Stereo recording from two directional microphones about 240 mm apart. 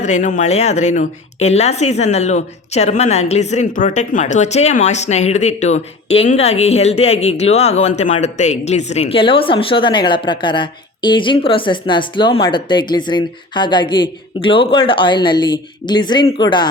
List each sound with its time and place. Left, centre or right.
0.0 s a woman's voice: left